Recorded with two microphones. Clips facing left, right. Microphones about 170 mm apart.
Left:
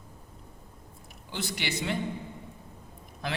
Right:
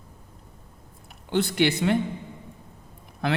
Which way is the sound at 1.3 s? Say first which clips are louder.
Right 12 dB; 55° right (ahead or behind).